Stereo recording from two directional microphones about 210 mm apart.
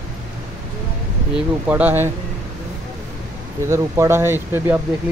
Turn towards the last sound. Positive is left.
turn(degrees=-10)  # may be behind; listen again after turning